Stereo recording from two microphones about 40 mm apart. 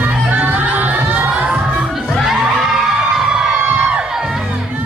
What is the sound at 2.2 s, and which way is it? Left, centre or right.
Crowd, centre.